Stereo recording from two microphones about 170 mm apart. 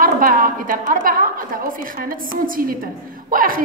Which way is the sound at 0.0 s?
55° right (ahead or behind).